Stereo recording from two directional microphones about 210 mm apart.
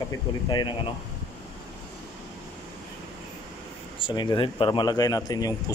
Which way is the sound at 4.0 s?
20° left (ahead or behind).